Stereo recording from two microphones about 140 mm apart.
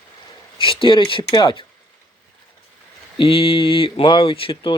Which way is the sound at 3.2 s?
40° left (ahead or behind).